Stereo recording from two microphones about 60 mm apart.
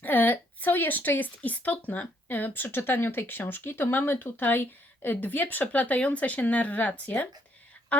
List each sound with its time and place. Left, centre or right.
0.0 s a woman's voice: left